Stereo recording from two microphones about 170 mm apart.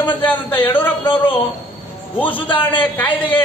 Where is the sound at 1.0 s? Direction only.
30° left (ahead or behind).